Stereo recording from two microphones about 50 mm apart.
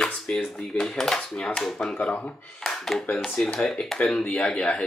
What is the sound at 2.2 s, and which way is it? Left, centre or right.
Speech, centre.